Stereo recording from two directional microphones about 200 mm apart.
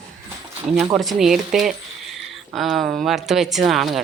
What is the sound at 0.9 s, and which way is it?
Speech, centre (ahead or behind).